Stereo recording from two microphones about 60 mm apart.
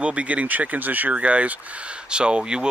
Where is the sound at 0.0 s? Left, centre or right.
Right.